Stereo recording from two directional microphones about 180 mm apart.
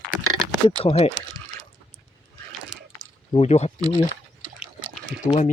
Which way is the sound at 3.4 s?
35° left (ahead or behind).